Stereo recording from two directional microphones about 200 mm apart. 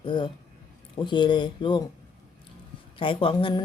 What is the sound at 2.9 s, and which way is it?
Speech, 25° left (ahead or behind).